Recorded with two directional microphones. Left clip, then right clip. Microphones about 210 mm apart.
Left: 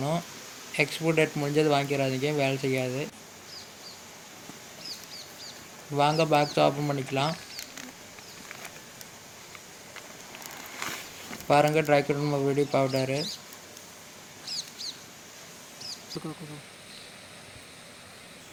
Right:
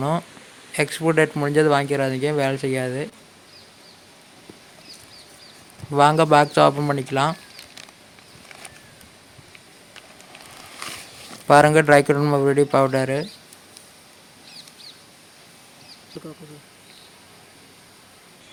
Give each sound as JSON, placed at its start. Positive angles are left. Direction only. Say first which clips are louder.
{"t": 0.8, "sound": "speech", "louder": "right 6 dB", "side_deg": -35}
{"t": 5.9, "sound": "speech", "louder": "right 8 dB", "side_deg": -40}
{"t": 11.4, "sound": "speech", "louder": "right 9 dB", "side_deg": -40}